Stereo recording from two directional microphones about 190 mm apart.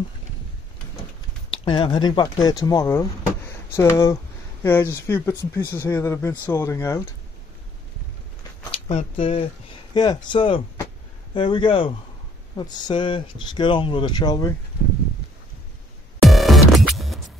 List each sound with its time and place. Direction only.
1.5 s speech: 25° left (ahead or behind)
8.7 s speech: 30° left (ahead or behind)
16.2 s music: centre (ahead or behind)